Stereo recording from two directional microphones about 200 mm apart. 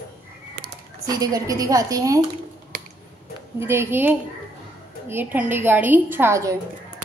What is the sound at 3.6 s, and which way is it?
A woman's voice, 10° right (ahead or behind).